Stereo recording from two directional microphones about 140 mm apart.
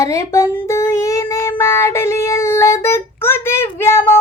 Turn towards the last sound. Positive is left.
turn(degrees=15)  # may be behind; listen again after turning